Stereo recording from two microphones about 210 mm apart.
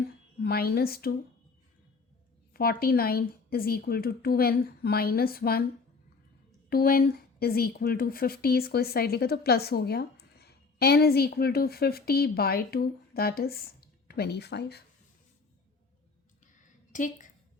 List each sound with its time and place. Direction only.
0.3 s a woman's voice: 45° left (ahead or behind)
2.5 s speech: 45° left (ahead or behind)
6.7 s speech: 45° left (ahead or behind)
16.9 s a woman's voice: 35° left (ahead or behind)